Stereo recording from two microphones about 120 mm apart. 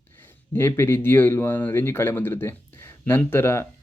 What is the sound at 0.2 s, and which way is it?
Speech, 20° left (ahead or behind).